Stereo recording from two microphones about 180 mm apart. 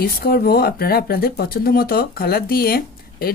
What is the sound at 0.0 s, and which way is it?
Speech, 55° left (ahead or behind).